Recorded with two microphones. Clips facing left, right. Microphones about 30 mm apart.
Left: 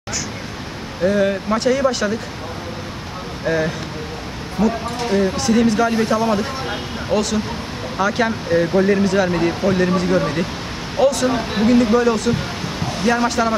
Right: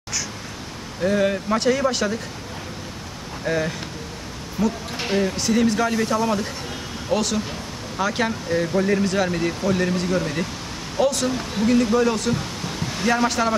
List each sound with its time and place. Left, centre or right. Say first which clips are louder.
1.0 s speech: left 3 dB; centre
3.4 s speech: left 4 dB; centre
4.6 s a man's voice: left 4 dB; left
5.4 s speech: left 4 dB; centre
5.9 s a man's voice: left 4 dB; left
7.1 s speech: left 3 dB; centre
8.3 s speech: left 5 dB; centre
10.0 s a man's voice: left 5 dB; left
11.7 s a man's voice: left 4 dB; left
12.0 s speech: left 3 dB; centre